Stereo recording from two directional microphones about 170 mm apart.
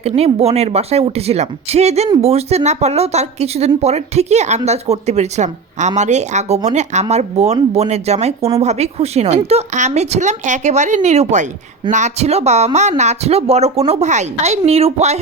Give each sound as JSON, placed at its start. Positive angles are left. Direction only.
{"t": 0.0, "sound": "speech", "side_deg": -35}